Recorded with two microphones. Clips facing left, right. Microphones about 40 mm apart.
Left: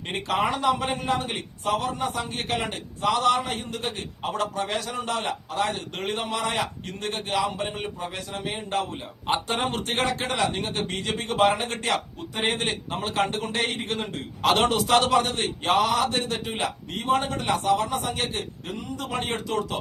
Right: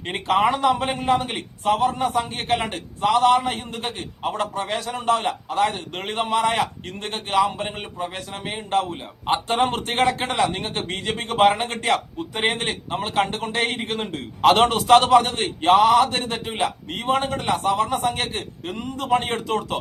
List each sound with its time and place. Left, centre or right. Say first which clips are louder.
0.6 s a man's voice: right 4 dB; right
1.2 s a man's voice: right 4 dB; right
1.7 s a man's voice: right 6 dB; right
3.8 s a man's voice: right 5 dB; centre
9.5 s a man's voice: right 6 dB; right
9.7 s a man's voice: right 5 dB; right